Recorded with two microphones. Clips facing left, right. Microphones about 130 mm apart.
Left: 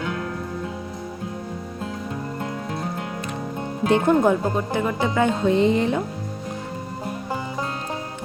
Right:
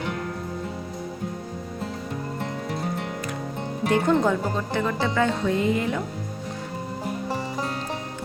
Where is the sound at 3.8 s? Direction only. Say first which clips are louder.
Left 3 dB; 20° left (ahead or behind).